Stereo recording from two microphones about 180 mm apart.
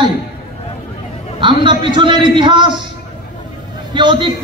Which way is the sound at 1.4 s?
25° right (ahead or behind).